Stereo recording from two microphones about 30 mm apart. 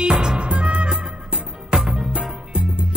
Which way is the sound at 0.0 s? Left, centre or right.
Right.